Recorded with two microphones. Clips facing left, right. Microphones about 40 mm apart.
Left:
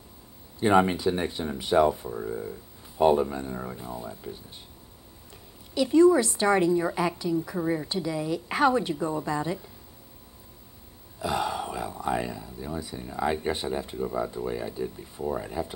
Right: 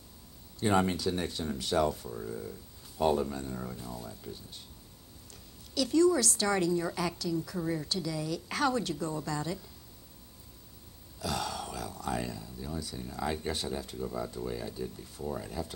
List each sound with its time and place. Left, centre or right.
0.6 s speech: left
5.8 s speech: left
11.1 s speech: left